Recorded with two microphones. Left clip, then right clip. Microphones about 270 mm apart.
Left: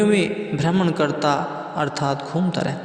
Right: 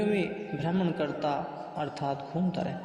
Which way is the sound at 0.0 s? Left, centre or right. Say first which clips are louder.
Left 10 dB; left.